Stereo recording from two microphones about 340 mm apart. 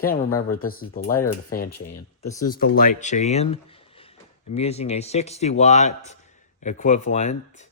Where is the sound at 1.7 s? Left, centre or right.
Left.